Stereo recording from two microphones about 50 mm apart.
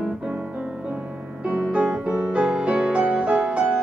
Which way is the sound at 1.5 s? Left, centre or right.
Centre.